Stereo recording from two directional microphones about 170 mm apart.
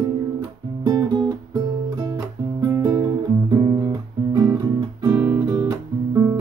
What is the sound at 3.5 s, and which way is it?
Guitar, 25° right (ahead or behind).